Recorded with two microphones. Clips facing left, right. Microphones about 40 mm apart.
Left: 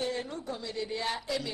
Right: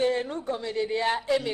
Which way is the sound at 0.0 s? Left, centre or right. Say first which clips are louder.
Right 8 dB; right.